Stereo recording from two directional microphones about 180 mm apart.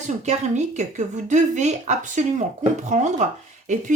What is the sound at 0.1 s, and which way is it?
Speech, 40° right (ahead or behind).